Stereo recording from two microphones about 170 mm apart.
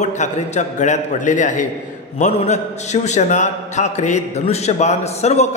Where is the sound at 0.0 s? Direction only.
45° left (ahead or behind).